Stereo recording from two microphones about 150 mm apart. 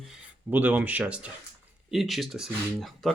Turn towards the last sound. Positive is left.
turn(degrees=0)  # may be behind; listen again after turning